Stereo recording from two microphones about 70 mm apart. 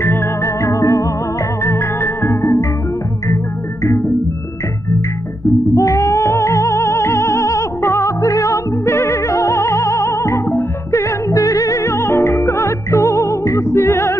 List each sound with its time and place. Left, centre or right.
0.6 s music: left
1.6 s organ: left
5.8 s music: left